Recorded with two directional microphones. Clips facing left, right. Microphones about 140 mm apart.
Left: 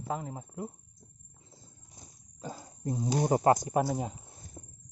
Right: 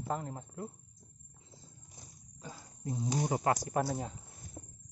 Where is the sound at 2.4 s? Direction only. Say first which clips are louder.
Left 7 dB; 40° left (ahead or behind).